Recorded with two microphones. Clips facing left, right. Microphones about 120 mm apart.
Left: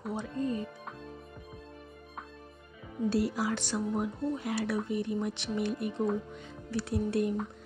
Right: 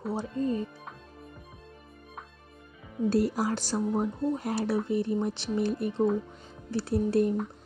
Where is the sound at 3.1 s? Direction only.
45° right (ahead or behind).